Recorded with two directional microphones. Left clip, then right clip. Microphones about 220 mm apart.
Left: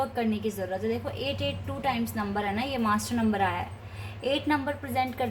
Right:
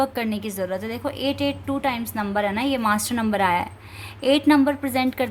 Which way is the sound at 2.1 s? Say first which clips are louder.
Right 6 dB; 50° right (ahead or behind).